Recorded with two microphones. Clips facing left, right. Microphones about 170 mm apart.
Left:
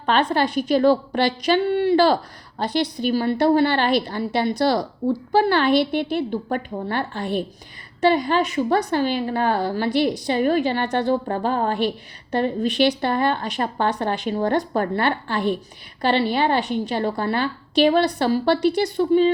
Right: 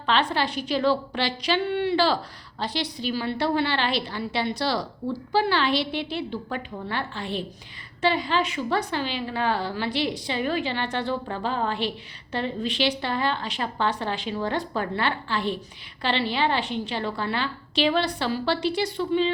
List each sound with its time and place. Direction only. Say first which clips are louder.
0.0 s a woman's voice: left 4 dB; 50° left (ahead or behind)